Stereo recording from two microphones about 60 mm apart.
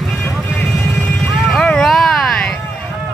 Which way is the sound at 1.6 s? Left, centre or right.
Centre.